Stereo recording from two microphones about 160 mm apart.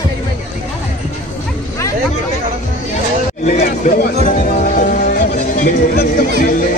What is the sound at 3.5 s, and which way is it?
Speech, 55° left (ahead or behind).